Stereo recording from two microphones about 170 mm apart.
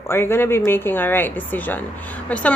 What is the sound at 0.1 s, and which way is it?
Speech, 15° left (ahead or behind).